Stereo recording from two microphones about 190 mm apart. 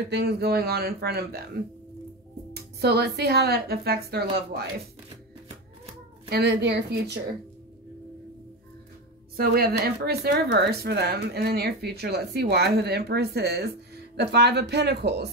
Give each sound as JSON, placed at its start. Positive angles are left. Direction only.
{"t": 0.1, "sound": "speech", "side_deg": -60}
{"t": 2.5, "sound": "speech", "side_deg": -60}
{"t": 6.3, "sound": "speech", "side_deg": -60}
{"t": 9.4, "sound": "speech", "side_deg": -55}